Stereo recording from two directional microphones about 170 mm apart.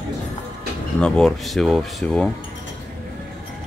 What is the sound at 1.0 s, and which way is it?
Speech, 5° left (ahead or behind).